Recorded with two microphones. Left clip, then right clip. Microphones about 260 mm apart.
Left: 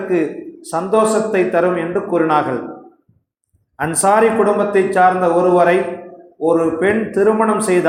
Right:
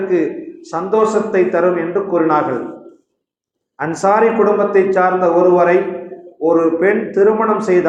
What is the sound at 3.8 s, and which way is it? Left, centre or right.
A man's voice, left.